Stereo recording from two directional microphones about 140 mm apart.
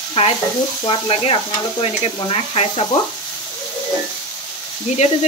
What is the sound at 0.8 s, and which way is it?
Stir, 40° left (ahead or behind).